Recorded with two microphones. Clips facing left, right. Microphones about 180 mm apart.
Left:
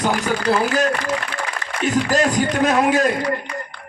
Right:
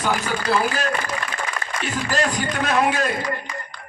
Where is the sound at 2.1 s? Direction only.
45° left (ahead or behind).